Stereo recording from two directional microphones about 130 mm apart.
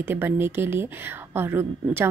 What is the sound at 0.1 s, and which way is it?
A woman's voice, 15° right (ahead or behind).